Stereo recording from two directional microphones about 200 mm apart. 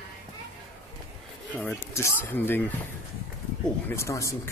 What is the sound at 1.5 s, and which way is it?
A man's voice, 10° left (ahead or behind).